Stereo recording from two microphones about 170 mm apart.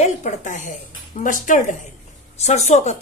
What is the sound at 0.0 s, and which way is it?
Speech, 45° left (ahead or behind).